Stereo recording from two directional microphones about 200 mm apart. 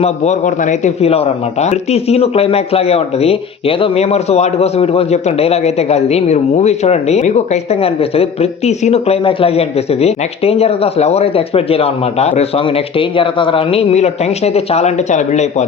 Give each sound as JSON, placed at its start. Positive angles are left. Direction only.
{"t": 0.0, "sound": "speech", "side_deg": 35}